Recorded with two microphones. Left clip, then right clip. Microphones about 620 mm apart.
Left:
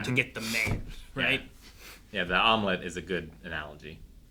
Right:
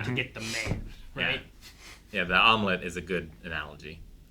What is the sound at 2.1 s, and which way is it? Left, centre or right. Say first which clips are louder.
Speech: right 2 dB; centre.